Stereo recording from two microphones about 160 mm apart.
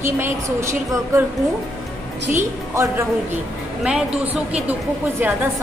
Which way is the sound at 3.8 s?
5° right (ahead or behind).